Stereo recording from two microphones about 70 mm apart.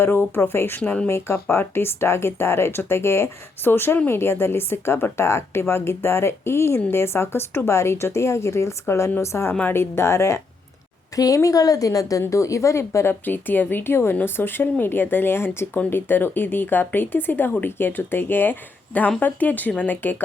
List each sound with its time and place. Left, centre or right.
0.0 s speech: left
11.1 s a woman's voice: left
13.2 s speech: left